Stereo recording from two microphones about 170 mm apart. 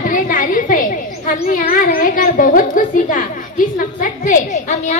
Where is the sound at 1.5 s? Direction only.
55° left (ahead or behind).